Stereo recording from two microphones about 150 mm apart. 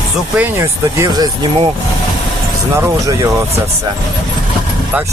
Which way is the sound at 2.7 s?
20° right (ahead or behind).